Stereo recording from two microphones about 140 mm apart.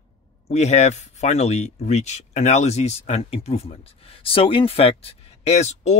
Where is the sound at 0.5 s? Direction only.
50° left (ahead or behind).